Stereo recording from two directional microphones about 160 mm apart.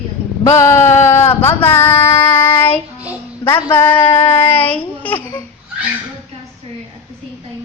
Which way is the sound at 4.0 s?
30° left (ahead or behind).